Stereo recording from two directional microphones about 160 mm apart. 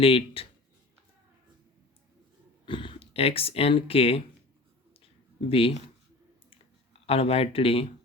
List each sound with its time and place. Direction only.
0.0 s speech: 35° left (ahead or behind)
2.6 s speech: 30° left (ahead or behind)
5.5 s speech: 35° left (ahead or behind)
7.1 s speech: 35° left (ahead or behind)